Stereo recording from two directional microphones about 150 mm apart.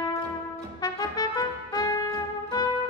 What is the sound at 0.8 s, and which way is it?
Music, 25° left (ahead or behind).